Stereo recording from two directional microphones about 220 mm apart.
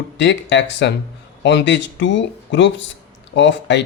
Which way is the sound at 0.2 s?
55° left (ahead or behind).